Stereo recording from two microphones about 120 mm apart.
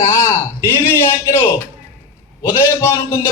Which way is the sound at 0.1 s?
20° left (ahead or behind).